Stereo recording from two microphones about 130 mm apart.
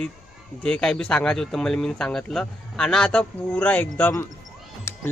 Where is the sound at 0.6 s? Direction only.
5° left (ahead or behind).